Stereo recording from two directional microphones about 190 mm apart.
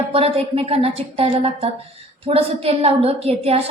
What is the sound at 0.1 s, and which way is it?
A woman's voice, 30° right (ahead or behind).